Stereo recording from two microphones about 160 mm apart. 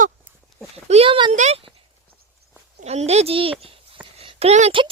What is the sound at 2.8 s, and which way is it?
A child's voice, 45° right (ahead or behind).